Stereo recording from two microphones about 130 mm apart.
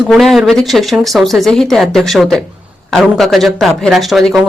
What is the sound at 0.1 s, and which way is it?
Speech, centre (ahead or behind).